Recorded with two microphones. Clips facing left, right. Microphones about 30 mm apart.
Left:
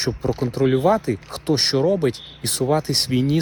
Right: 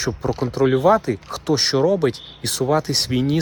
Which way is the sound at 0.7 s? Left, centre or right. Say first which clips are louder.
Right 2 dB; right.